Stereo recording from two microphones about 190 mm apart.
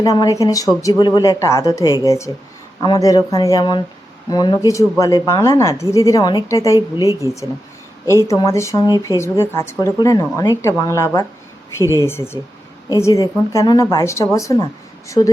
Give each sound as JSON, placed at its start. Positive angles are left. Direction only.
{"t": 0.0, "sound": "speech", "side_deg": 20}
{"t": 7.0, "sound": "speech", "side_deg": -15}
{"t": 8.3, "sound": "speech", "side_deg": 15}